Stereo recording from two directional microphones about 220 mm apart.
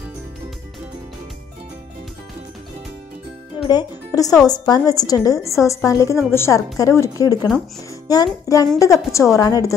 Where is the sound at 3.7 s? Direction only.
15° left (ahead or behind).